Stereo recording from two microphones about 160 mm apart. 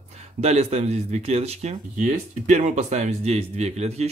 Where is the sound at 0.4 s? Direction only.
40° right (ahead or behind).